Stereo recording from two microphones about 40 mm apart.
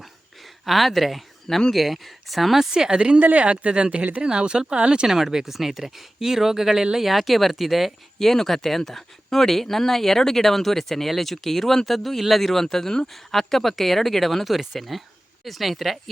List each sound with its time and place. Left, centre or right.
0.6 s speech: centre
2.7 s speech: centre
3.2 s speech: right
5.0 s speech: centre